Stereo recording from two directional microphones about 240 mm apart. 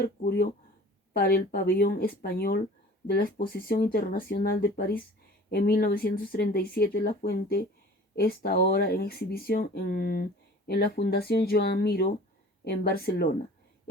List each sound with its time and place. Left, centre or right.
0.0 s speech: left